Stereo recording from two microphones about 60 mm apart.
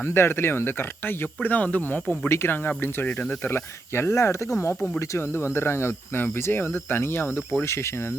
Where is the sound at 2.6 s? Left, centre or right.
Left.